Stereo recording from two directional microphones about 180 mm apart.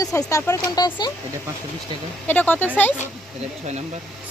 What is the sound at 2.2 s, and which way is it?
Speech, 10° left (ahead or behind).